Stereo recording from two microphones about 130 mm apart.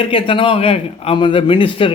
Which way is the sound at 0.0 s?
45° left (ahead or behind).